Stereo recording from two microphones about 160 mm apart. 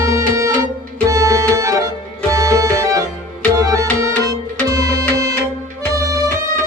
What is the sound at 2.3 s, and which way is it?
Music, 20° right (ahead or behind).